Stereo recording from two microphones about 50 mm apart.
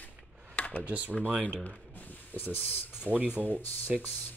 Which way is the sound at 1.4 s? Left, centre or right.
Left.